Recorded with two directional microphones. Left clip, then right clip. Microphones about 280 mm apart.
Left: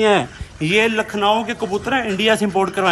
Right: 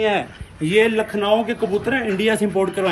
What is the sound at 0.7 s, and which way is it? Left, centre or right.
Speech, centre.